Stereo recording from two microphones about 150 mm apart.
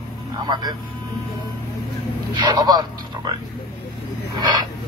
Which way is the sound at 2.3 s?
30° right (ahead or behind).